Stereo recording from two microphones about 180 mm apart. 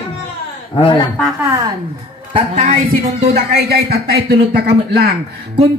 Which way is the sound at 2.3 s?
40° right (ahead or behind).